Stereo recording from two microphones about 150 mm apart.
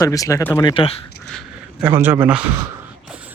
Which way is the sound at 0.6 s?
35° left (ahead or behind).